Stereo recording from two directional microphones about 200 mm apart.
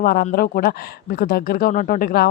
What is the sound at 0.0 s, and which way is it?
Speech, 50° left (ahead or behind).